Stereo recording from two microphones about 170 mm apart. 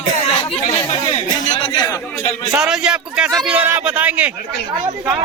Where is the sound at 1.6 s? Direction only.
25° left (ahead or behind).